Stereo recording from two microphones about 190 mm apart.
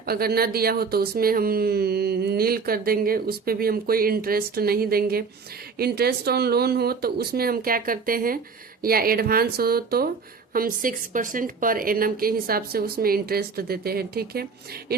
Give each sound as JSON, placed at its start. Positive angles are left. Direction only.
{"t": 0.0, "sound": "speech", "side_deg": -55}